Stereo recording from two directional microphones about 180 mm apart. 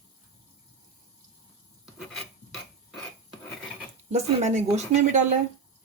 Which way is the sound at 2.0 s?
Centre (ahead or behind).